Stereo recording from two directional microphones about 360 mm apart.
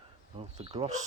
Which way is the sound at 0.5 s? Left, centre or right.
Centre.